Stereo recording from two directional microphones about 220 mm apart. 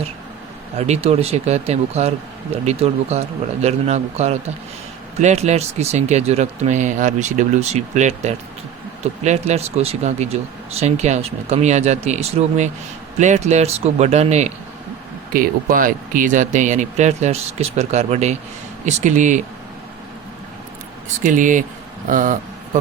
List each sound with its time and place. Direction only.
0.8 s speech: 30° right (ahead or behind)
21.2 s speech: 35° right (ahead or behind)